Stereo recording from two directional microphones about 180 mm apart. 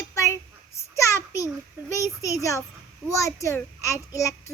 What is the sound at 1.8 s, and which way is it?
A child's voice, 15° left (ahead or behind).